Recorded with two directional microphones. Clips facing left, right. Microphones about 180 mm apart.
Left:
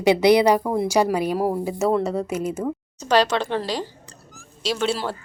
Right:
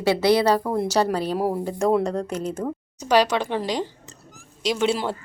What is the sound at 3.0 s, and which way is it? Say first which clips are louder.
A woman's voice: even; 10° right (ahead or behind).